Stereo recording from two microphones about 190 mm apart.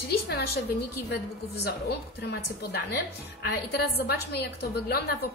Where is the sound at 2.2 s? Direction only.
60° left (ahead or behind).